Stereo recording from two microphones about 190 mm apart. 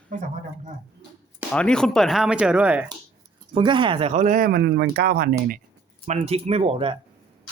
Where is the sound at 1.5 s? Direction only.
5° left (ahead or behind).